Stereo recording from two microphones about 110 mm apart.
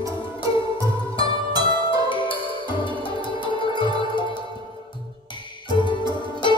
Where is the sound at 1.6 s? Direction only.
50° left (ahead or behind).